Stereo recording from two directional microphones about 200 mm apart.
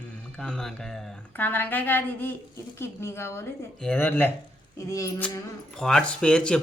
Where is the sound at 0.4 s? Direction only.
5° left (ahead or behind).